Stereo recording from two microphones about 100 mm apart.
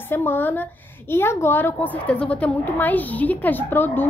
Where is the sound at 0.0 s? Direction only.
20° left (ahead or behind).